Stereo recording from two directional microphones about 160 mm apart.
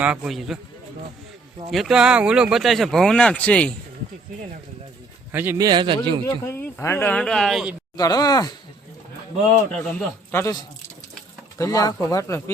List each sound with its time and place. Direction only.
0.0 s speech: 10° right (ahead or behind)
1.7 s speech: centre (ahead or behind)
5.3 s a man's voice: 15° right (ahead or behind); by 6.0 s 30° right (ahead or behind)
6.2 s speech: 15° left (ahead or behind); by 7.8 s 5° right (ahead or behind)
7.9 s speech: 20° left (ahead or behind)
9.7 s speech: 10° left (ahead or behind)